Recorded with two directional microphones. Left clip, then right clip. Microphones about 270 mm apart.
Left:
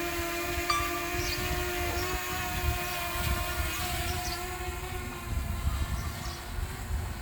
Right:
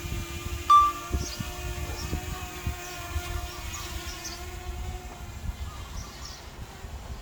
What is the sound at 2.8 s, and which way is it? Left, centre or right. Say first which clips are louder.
Vehicle: left 5 dB; centre.